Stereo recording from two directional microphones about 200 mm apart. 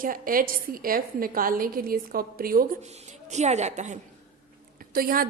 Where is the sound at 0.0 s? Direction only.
45° right (ahead or behind).